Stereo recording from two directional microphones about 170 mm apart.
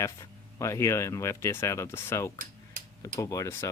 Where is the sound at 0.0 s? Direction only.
15° left (ahead or behind).